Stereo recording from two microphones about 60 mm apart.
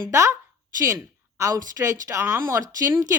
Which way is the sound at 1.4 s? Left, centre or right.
Right.